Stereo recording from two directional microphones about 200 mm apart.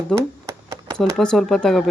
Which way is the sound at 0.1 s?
Centre (ahead or behind).